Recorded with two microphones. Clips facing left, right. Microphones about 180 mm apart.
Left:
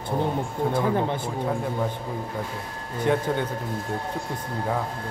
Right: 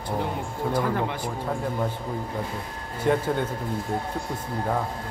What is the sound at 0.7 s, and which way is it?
Speech, 25° left (ahead or behind).